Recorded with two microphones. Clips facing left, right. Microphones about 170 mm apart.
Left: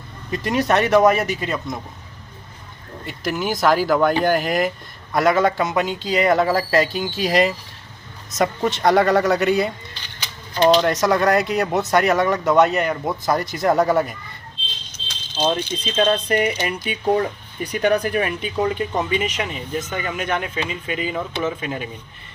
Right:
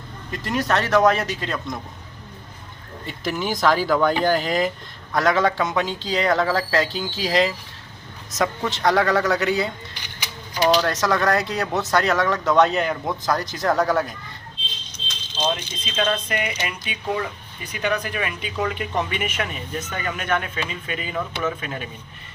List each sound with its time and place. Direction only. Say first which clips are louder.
0.3 s speech: left 4 dB; 15° left (ahead or behind)
3.1 s speech: left 2 dB; 5° left (ahead or behind)
9.9 s a sound: right 1 dB; 10° right (ahead or behind)
10.8 s speech: left 3 dB; 15° left (ahead or behind)
15.4 s speech: left 4 dB; 35° left (ahead or behind)
18.5 s speech: left 3 dB; 25° left (ahead or behind)